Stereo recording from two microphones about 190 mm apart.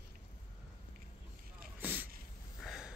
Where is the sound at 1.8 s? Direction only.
10° right (ahead or behind).